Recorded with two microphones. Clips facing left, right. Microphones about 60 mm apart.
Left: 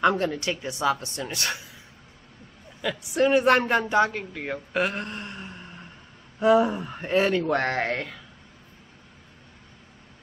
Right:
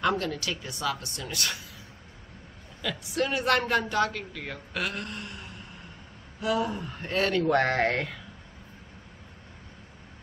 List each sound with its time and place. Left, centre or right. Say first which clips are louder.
0.0 s a woman's voice: left 5 dB; left
2.8 s a woman's voice: left 6 dB; centre
7.6 s speech: right 1 dB; centre